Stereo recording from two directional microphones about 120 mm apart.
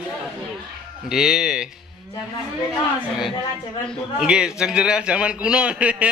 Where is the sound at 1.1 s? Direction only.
5° right (ahead or behind).